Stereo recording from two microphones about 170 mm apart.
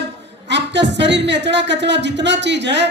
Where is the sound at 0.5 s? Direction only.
90° right.